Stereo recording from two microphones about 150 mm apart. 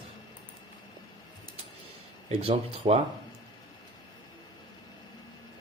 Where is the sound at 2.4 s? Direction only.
40° right (ahead or behind).